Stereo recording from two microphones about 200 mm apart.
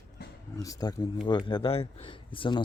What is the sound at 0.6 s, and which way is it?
Speech, 20° left (ahead or behind).